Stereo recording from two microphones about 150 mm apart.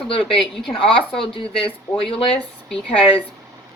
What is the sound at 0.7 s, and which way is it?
Speech, 35° left (ahead or behind).